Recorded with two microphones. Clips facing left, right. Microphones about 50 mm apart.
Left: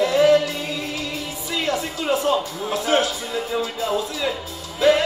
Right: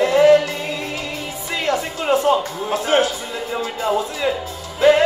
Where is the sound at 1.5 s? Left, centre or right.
Right.